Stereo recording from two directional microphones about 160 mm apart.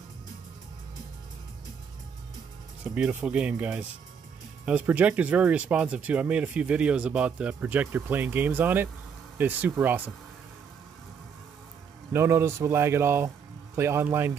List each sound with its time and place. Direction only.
2.8 s speech: 10° right (ahead or behind)
12.1 s speech: 15° right (ahead or behind)